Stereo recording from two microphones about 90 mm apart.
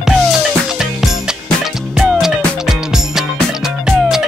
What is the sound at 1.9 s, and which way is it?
Music, 5° right (ahead or behind).